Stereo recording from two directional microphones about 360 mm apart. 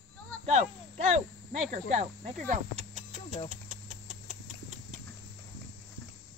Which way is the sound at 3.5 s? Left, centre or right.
Centre.